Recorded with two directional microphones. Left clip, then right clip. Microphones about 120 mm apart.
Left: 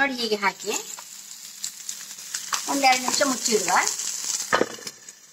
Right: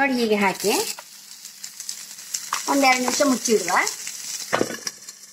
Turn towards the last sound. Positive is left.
turn(degrees=-25)  # may be behind; listen again after turning